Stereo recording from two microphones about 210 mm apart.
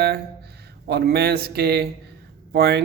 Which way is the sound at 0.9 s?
50° right (ahead or behind).